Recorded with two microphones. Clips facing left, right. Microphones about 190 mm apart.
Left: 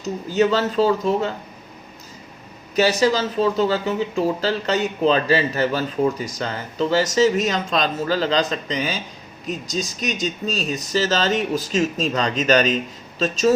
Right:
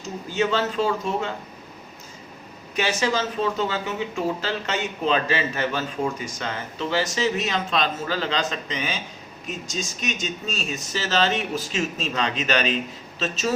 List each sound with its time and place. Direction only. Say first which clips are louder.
0.0 s speech: left 6 dB; 40° left (ahead or behind)
2.7 s speech: left 6 dB; 35° left (ahead or behind)